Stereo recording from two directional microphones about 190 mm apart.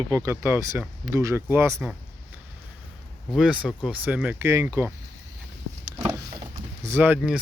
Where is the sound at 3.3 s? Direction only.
5° right (ahead or behind).